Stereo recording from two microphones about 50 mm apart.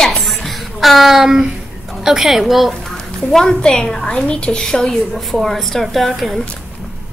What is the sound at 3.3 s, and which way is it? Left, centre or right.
A woman's voice, centre.